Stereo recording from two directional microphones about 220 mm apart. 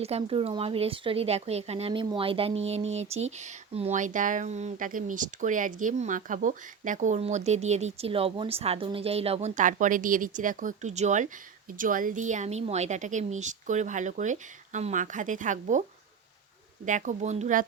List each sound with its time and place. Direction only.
0.0 s speech: 25° right (ahead or behind)
16.8 s speech: 35° right (ahead or behind)